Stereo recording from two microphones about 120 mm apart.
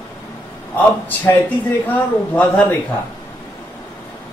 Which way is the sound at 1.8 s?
15° left (ahead or behind).